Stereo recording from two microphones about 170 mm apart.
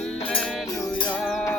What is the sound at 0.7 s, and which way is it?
Music, 20° left (ahead or behind).